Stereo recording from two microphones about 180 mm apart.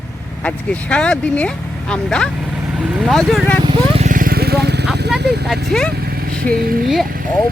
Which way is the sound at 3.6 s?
35° right (ahead or behind).